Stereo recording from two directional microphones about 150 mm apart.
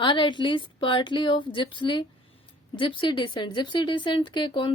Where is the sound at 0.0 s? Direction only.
35° left (ahead or behind).